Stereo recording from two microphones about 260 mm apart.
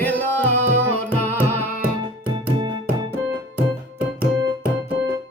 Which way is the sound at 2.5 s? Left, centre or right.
Centre.